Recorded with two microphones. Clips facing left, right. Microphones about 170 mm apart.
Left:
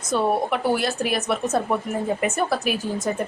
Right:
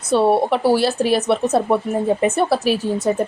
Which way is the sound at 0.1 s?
30° right (ahead or behind).